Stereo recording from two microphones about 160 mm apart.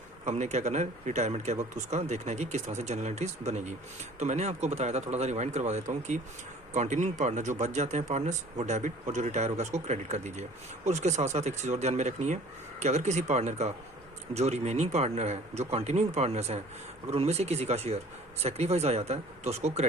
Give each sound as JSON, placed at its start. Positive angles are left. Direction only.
{"t": 0.3, "sound": "speech", "side_deg": -45}